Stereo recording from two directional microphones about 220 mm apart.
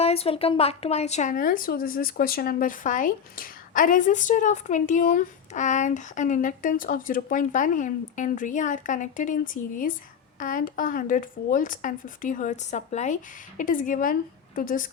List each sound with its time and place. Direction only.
0.0 s speech: 25° left (ahead or behind)